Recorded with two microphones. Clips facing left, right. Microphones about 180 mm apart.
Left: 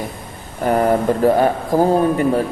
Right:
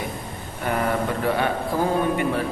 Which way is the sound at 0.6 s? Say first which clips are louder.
Left 8 dB; 40° left (ahead or behind).